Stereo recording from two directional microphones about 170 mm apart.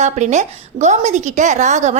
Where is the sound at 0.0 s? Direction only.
45° right (ahead or behind).